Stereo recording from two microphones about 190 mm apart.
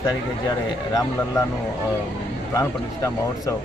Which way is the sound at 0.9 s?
15° left (ahead or behind).